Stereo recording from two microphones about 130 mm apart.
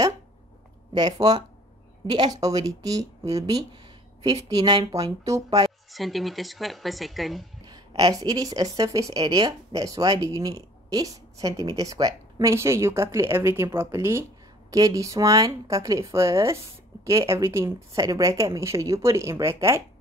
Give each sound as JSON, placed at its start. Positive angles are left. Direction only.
{"t": 0.9, "sound": "a woman's voice", "side_deg": -30}
{"t": 5.9, "sound": "speech", "side_deg": 0}
{"t": 7.6, "sound": "a woman's voice", "side_deg": -30}